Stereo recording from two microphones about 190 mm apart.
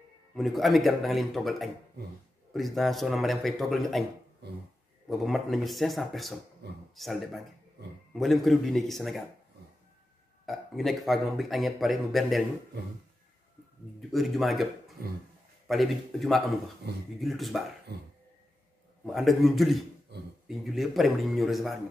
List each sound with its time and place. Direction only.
0.3 s a man's voice: centre (ahead or behind)
5.1 s a man's voice: centre (ahead or behind)
10.4 s a man's voice: centre (ahead or behind)
14.1 s a man's voice: centre (ahead or behind)
17.9 s cough: 55° right (ahead or behind)
19.0 s a man's voice: centre (ahead or behind)